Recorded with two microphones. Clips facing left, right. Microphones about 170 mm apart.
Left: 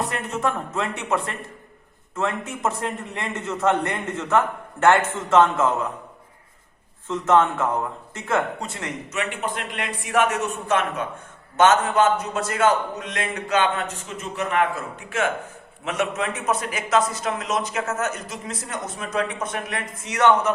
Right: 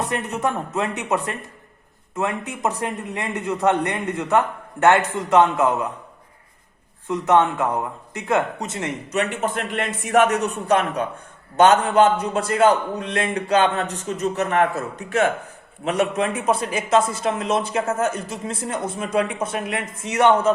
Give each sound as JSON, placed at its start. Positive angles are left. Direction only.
{"t": 0.0, "sound": "a man's voice", "side_deg": -20}
{"t": 7.1, "sound": "a man's voice", "side_deg": -15}
{"t": 9.1, "sound": "a man's voice", "side_deg": -45}